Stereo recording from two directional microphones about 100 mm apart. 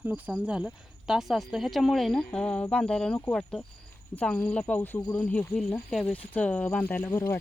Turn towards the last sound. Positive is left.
turn(degrees=25)  # may be behind; listen again after turning